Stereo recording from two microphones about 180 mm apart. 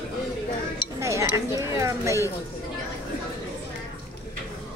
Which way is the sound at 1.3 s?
15° right (ahead or behind).